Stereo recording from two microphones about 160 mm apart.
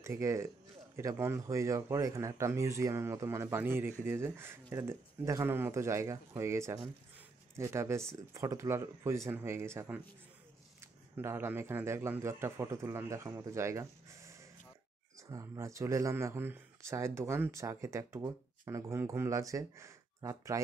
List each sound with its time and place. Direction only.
0.0 s speech: 20° right (ahead or behind)